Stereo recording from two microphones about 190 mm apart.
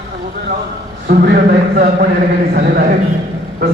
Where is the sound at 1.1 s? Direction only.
55° right (ahead or behind).